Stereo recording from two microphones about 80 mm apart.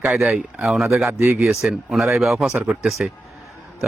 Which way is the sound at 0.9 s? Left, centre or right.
Right.